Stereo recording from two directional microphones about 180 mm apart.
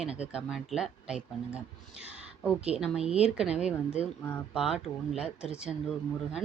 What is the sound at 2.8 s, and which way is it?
Speech, 5° right (ahead or behind).